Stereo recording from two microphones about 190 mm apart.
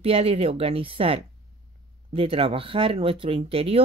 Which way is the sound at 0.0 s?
30° right (ahead or behind).